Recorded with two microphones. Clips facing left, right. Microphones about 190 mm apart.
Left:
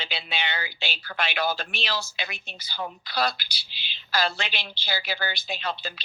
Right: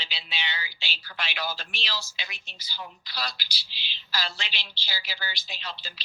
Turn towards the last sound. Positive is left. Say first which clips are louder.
# left 9 dB
turn(degrees=55)  # may be behind; listen again after turning